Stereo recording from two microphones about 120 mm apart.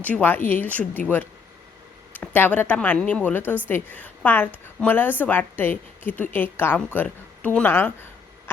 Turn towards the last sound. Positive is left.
turn(degrees=15)  # may be behind; listen again after turning